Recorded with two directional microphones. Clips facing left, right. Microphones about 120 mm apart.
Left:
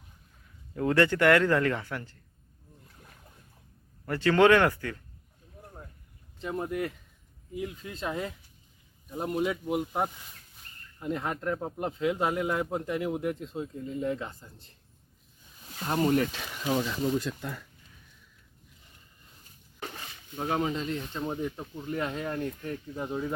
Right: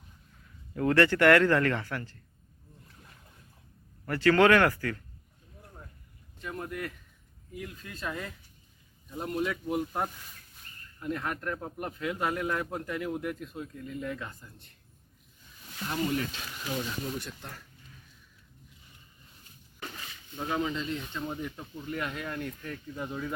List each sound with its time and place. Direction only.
0.8 s speech: 15° left (ahead or behind)
4.0 s a man's voice: 20° left (ahead or behind)
6.4 s a man's voice: 25° left (ahead or behind)
15.8 s speech: 40° left (ahead or behind)
16.6 s speech: 75° left (ahead or behind)
20.3 s speech: 45° left (ahead or behind)
21.2 s a man's voice: 25° left (ahead or behind)